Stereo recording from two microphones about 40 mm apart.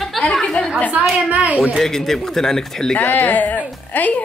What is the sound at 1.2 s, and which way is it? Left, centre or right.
Speech, right.